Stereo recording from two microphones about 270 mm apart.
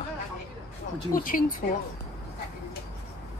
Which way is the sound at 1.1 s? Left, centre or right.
Left.